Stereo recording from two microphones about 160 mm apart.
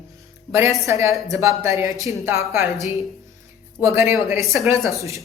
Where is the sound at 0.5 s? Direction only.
15° right (ahead or behind).